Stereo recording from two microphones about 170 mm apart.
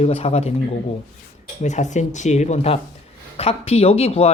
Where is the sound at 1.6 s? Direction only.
45° left (ahead or behind).